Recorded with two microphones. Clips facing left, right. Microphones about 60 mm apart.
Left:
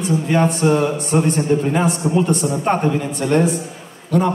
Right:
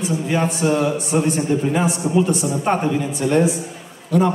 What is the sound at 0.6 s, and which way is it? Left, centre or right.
Speech, centre.